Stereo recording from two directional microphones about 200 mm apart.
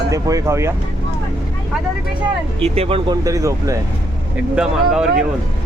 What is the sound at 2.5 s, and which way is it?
Speech, 30° right (ahead or behind).